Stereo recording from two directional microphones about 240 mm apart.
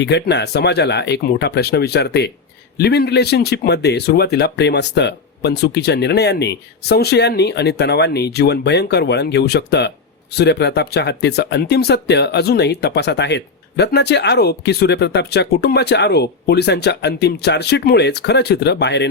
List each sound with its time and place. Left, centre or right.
0.0 s speech: left